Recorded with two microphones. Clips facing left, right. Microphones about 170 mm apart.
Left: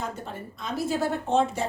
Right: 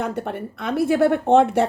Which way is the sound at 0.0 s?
65° right (ahead or behind).